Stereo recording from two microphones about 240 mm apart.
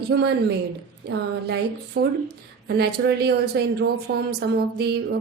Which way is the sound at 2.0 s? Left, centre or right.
Right.